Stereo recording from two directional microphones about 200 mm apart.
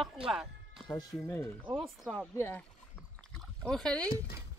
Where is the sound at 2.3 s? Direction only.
10° left (ahead or behind).